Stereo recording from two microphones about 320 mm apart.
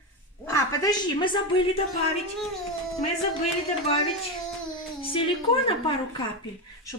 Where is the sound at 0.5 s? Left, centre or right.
Centre.